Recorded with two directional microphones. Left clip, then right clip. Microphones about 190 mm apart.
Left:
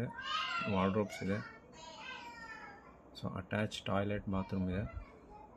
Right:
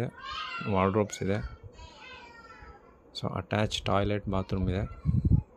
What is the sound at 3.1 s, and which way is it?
Speech, 50° right (ahead or behind).